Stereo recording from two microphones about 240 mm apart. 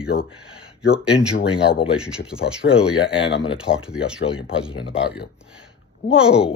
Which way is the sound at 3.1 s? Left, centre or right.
Left.